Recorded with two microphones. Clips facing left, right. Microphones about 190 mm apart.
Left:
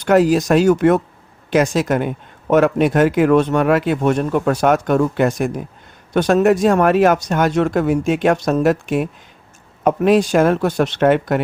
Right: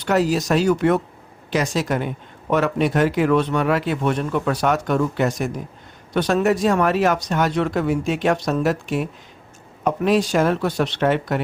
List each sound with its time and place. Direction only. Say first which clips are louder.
0.0 s speech: left 6 dB; 50° left (ahead or behind)